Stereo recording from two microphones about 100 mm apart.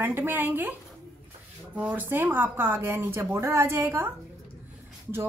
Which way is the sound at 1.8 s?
20° right (ahead or behind).